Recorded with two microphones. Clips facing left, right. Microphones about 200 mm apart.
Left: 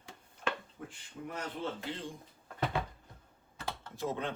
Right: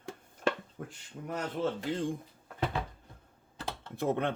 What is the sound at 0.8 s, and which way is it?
Speech, 55° right (ahead or behind).